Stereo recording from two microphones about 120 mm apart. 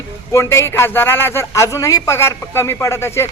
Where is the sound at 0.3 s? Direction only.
20° left (ahead or behind).